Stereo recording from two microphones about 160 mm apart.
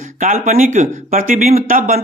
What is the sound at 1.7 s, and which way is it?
Speech, 65° right (ahead or behind).